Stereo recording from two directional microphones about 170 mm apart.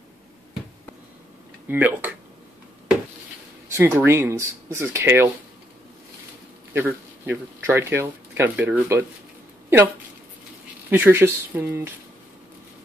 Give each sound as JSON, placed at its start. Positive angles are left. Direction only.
{"t": 1.7, "sound": "speech", "side_deg": -10}
{"t": 3.6, "sound": "speech", "side_deg": -15}
{"t": 6.7, "sound": "speech", "side_deg": -10}
{"t": 10.9, "sound": "speech", "side_deg": -10}